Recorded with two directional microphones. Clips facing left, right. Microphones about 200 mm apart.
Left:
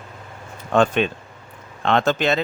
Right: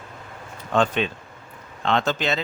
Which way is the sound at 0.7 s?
50° left (ahead or behind).